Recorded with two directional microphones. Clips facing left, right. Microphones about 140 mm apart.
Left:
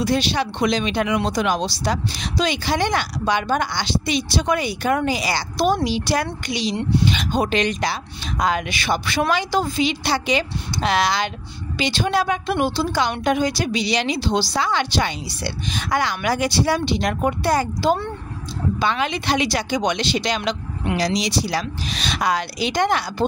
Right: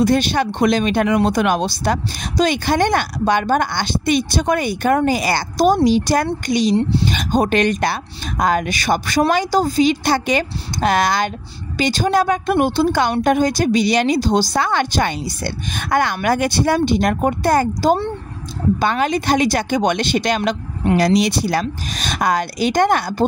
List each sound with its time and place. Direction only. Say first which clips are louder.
0.0 s speech: right 5 dB; 50° right (ahead or behind)
6.8 s speech: right 2 dB; 30° right (ahead or behind)
7.1 s speech: right 4 dB; 45° right (ahead or behind)